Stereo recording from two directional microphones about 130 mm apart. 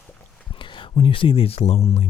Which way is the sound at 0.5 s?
40° left (ahead or behind).